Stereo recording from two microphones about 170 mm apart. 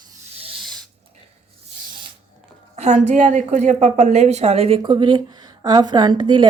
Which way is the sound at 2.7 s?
40° right (ahead or behind).